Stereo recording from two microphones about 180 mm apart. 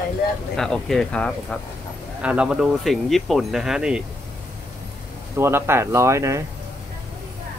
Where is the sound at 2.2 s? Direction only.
5° right (ahead or behind).